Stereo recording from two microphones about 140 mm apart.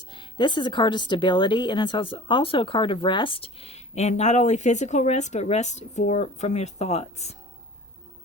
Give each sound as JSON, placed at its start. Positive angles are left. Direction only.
{"t": 0.1, "sound": "speech", "side_deg": 35}